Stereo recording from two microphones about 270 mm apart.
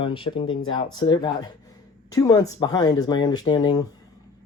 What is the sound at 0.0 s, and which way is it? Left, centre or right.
Speech, centre.